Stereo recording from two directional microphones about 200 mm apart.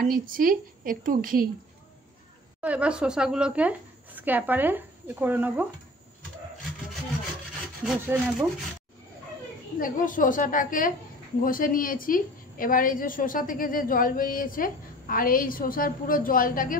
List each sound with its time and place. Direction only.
0.0 s a woman's voice: 45° right (ahead or behind)
2.6 s a woman's voice: 5° right (ahead or behind)
7.8 s speech: 5° right (ahead or behind)
9.8 s a woman's voice: 40° left (ahead or behind)